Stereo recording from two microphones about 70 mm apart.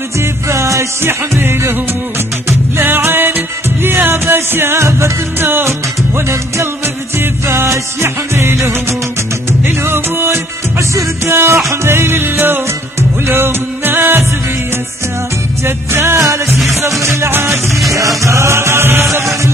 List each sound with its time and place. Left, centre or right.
0.2 s music: right
2.8 s music: right
15.6 s music: right
16.4 s music: centre
17.2 s music: right
17.9 s music: right